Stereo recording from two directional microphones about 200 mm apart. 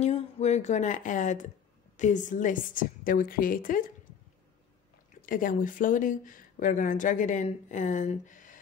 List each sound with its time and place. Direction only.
0.0 s a woman's voice: 35° left (ahead or behind)
5.2 s speech: 45° left (ahead or behind)